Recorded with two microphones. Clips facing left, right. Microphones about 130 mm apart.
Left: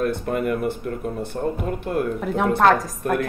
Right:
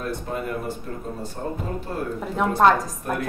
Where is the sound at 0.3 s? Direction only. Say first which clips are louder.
Left 6 dB; 60° left (ahead or behind).